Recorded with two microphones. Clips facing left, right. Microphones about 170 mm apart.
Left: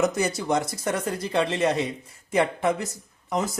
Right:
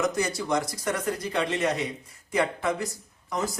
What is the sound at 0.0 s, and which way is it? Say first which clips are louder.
Speech: left 3 dB; 25° left (ahead or behind).